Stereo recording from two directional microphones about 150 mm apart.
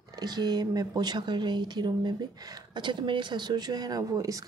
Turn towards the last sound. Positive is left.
turn(degrees=-20)  # may be behind; listen again after turning